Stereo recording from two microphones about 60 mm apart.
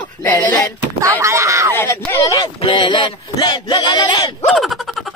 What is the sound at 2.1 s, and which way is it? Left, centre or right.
Speech, left.